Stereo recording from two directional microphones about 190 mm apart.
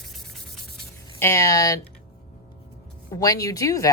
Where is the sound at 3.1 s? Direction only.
20° left (ahead or behind).